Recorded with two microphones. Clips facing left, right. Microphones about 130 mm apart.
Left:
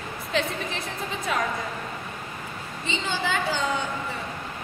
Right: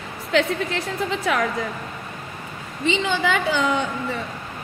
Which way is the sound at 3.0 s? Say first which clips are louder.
Right 5 dB; 65° right (ahead or behind).